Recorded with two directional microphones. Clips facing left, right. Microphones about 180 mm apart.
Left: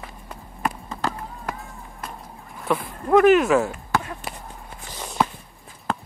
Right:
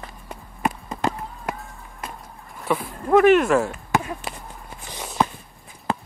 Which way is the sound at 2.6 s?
Centre (ahead or behind).